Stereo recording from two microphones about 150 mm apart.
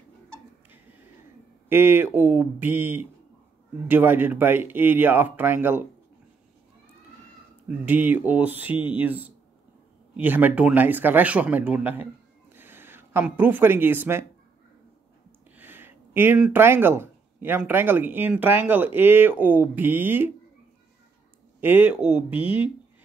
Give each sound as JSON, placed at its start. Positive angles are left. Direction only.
{"t": 1.7, "sound": "speech", "side_deg": -15}
{"t": 7.8, "sound": "speech", "side_deg": -10}
{"t": 15.5, "sound": "speech", "side_deg": -15}
{"t": 21.5, "sound": "speech", "side_deg": -15}